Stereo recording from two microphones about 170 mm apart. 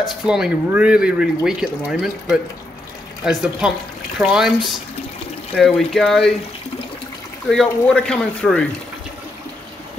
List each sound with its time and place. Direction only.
0.3 s speech: 5° right (ahead or behind)
7.4 s speech: 5° left (ahead or behind)